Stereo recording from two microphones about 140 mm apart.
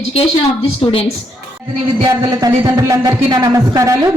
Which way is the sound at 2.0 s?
25° right (ahead or behind).